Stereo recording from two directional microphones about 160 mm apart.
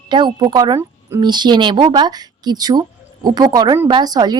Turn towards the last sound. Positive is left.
turn(degrees=-25)  # may be behind; listen again after turning